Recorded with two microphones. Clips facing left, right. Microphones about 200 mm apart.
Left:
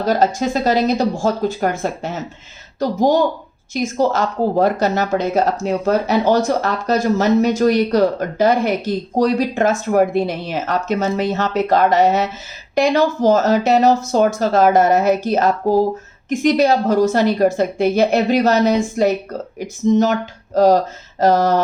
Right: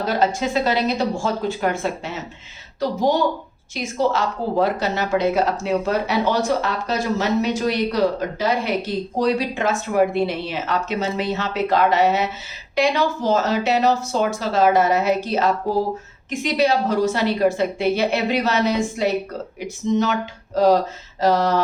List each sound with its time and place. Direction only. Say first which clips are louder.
0.0 s speech: left 4 dB; 40° left (ahead or behind)
3.8 s speech: left 4 dB; 45° left (ahead or behind)